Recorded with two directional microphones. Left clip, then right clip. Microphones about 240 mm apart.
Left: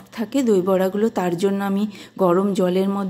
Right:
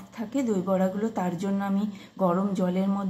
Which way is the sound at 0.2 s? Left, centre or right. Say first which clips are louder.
Left 10 dB; left.